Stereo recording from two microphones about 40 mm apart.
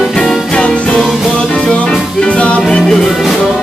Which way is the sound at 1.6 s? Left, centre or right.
Left.